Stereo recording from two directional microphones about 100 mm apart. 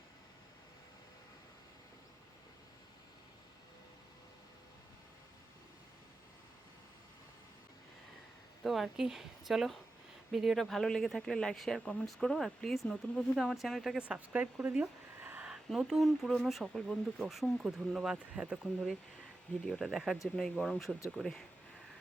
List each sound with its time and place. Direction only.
8.6 s speech: centre (ahead or behind)
14.0 s speech: 15° right (ahead or behind)
15.4 s speech: 5° right (ahead or behind)